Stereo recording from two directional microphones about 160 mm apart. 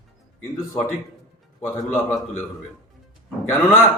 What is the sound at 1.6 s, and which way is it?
Speech, 15° left (ahead or behind).